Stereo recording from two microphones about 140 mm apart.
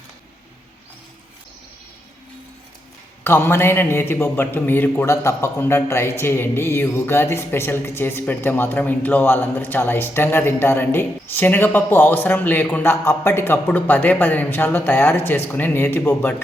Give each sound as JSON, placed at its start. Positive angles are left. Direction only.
{"t": 3.2, "sound": "a man's voice", "side_deg": 15}